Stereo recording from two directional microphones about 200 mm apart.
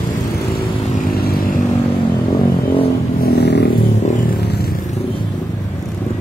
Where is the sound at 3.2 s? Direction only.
55° left (ahead or behind).